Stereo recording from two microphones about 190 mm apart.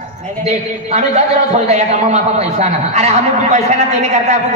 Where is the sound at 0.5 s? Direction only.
35° right (ahead or behind).